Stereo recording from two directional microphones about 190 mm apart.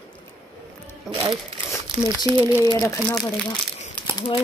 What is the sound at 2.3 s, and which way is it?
Speech, 25° right (ahead or behind).